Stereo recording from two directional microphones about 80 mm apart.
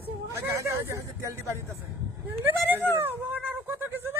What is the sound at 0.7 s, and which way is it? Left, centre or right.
Speech, right.